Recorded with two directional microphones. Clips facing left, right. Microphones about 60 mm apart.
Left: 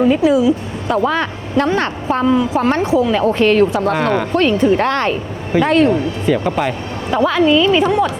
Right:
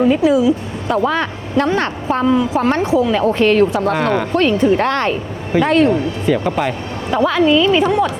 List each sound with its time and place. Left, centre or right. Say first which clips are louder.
0.0 s speech: even; left